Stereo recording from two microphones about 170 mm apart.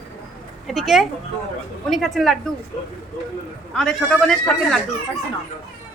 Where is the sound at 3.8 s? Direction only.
5° left (ahead or behind).